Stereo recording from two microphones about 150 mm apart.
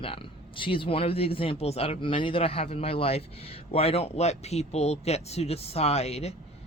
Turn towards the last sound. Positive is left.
turn(degrees=45)  # may be behind; listen again after turning